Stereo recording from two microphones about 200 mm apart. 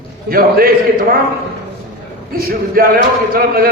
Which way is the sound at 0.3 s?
45° right (ahead or behind).